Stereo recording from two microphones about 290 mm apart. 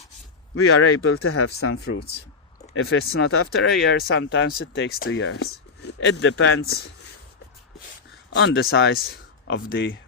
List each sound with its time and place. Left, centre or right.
0.5 s speech: left
5.8 s a sound: left
6.1 s speech: left
8.3 s speech: left